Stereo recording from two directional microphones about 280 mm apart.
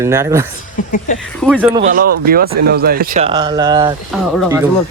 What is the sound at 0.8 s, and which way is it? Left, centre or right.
Speech, left.